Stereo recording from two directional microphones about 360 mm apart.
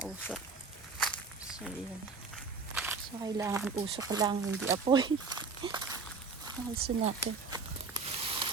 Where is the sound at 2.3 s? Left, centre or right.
Centre.